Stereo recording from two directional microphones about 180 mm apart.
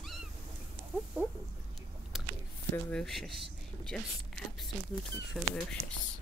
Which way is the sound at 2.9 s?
Centre (ahead or behind).